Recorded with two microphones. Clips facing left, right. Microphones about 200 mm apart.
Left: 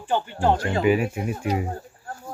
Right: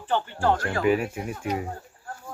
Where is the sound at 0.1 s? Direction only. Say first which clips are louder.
Left 2 dB; 15° left (ahead or behind).